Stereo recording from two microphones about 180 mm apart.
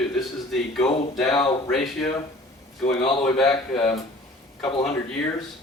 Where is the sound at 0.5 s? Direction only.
Centre (ahead or behind).